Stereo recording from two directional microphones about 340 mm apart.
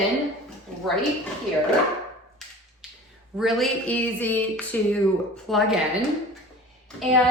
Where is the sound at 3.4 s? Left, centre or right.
Centre.